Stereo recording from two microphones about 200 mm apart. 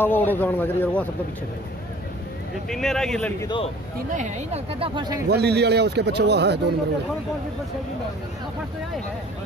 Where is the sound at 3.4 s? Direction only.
25° left (ahead or behind).